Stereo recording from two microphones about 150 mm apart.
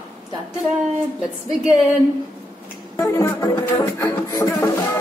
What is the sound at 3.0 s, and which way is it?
Music, 20° left (ahead or behind).